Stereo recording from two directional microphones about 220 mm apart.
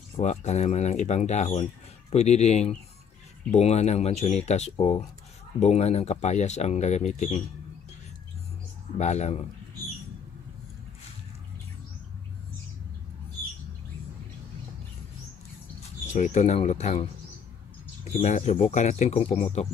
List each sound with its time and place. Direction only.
0.2 s speech: 30° left (ahead or behind)
8.9 s speech: 30° left (ahead or behind)
16.1 s speech: 30° left (ahead or behind)
18.2 s speech: 30° left (ahead or behind)